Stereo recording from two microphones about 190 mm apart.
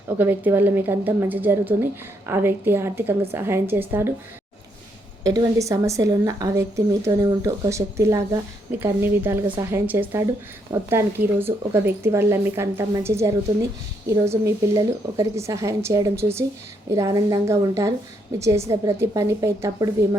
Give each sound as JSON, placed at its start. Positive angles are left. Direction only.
{"t": 0.2, "sound": "a woman's voice", "side_deg": -10}
{"t": 5.2, "sound": "a woman's voice", "side_deg": -20}